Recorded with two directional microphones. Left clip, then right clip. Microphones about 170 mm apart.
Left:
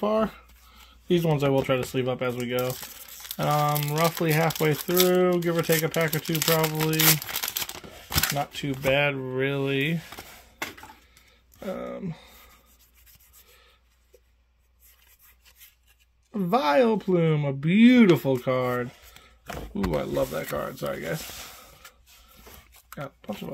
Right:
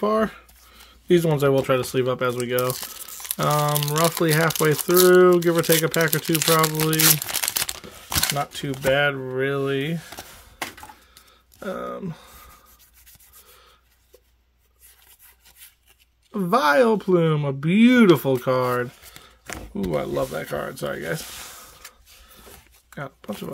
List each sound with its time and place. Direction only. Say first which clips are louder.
0.0 s speech: right 3 dB; 35° right (ahead or behind)
3.6 s speech: right 3 dB; 30° right (ahead or behind)
7.0 s crumpling: right 1 dB; 30° right (ahead or behind)
8.4 s speech: right 3 dB; 25° right (ahead or behind); by 10.2 s 5° right (ahead or behind)
11.6 s speech: right 3 dB; 20° right (ahead or behind)
16.3 s speech: right 4 dB; 25° right (ahead or behind)
19.7 s speech: right 3 dB; 20° right (ahead or behind)
22.9 s speech: right 3 dB; 40° right (ahead or behind)